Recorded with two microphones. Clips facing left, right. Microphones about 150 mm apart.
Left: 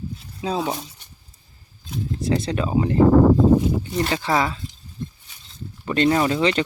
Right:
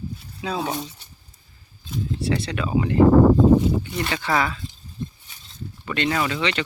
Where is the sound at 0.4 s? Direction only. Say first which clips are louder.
Left 3 dB; 30° left (ahead or behind).